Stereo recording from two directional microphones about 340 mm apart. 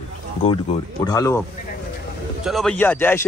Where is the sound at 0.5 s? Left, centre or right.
Centre.